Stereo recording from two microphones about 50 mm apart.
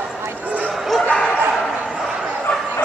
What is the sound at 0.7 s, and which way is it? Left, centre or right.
Bow-wow, centre.